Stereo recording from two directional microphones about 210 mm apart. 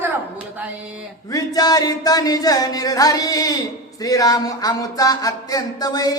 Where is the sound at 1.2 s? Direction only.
15° left (ahead or behind).